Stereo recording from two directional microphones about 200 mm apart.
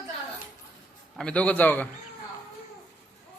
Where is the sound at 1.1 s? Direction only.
5° left (ahead or behind).